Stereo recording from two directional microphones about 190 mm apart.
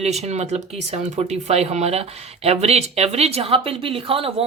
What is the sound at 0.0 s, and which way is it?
Speech, 35° right (ahead or behind).